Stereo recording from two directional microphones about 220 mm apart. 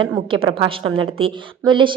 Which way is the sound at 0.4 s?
25° right (ahead or behind).